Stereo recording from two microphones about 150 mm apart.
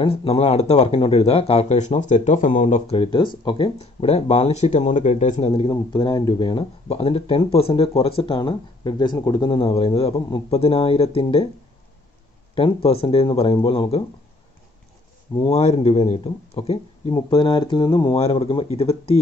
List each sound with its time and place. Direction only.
0.0 s speech: 40° left (ahead or behind)
3.0 s speech: 35° left (ahead or behind); by 5.5 s 50° left (ahead or behind)
5.7 s speech: 25° left (ahead or behind)
12.5 s speech: 40° left (ahead or behind)
15.5 s speech: 45° left (ahead or behind)
17.1 s speech: 30° left (ahead or behind)
18.1 s speech: 40° left (ahead or behind)